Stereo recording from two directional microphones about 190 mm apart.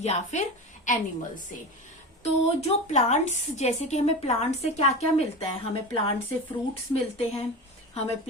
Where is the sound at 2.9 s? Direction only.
35° left (ahead or behind).